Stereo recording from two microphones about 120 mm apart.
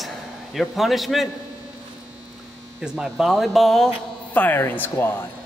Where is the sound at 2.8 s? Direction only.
5° right (ahead or behind); by 5.1 s 15° left (ahead or behind).